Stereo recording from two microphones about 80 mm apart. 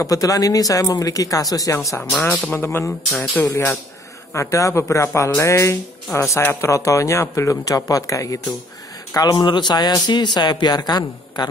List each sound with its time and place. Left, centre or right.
0.0 s speech: left
2.0 s speech: left
4.3 s a man's voice: left
9.1 s a man's voice: left